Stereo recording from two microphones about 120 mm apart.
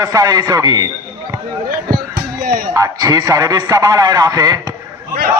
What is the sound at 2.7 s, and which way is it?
A man's voice, 30° right (ahead or behind).